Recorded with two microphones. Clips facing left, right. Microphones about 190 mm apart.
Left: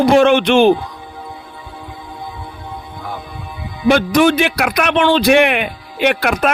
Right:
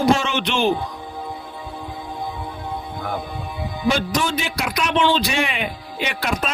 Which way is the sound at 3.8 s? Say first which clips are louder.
Left 10 dB; 65° left (ahead or behind).